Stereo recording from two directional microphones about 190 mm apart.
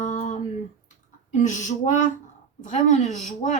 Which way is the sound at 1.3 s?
40° left (ahead or behind).